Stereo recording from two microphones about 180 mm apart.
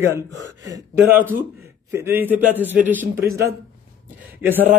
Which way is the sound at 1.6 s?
15° right (ahead or behind).